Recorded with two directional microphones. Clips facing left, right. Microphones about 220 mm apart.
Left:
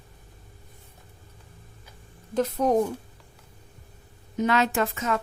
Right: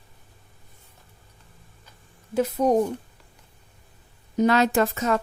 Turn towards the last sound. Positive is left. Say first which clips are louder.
# right 4 dB
turn(degrees=-40)  # may be behind; listen again after turning